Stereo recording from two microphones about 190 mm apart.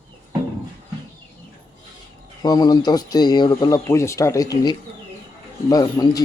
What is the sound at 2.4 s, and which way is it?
Speech, 20° left (ahead or behind).